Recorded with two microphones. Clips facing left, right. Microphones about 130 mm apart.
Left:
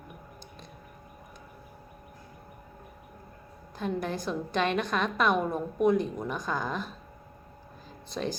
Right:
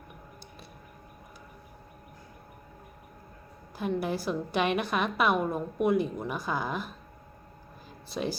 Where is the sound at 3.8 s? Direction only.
10° right (ahead or behind).